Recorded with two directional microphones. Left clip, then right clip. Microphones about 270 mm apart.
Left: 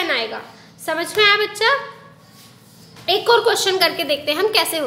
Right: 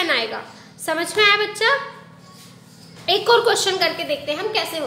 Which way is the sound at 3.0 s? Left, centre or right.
Centre.